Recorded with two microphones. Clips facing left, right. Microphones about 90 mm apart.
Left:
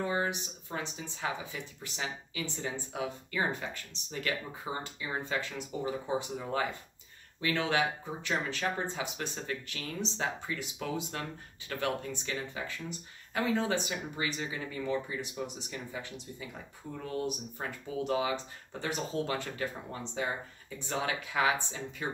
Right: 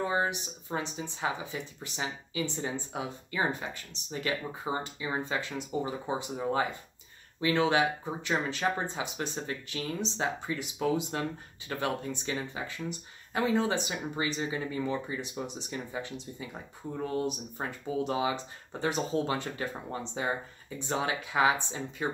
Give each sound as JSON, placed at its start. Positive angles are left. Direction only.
{"t": 0.0, "sound": "speech", "side_deg": -20}